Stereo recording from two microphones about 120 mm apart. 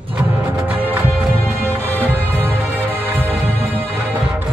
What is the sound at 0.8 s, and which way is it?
Music, 15° right (ahead or behind).